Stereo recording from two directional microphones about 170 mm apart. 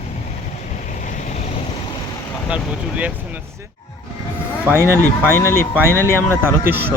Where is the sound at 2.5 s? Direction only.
5° right (ahead or behind).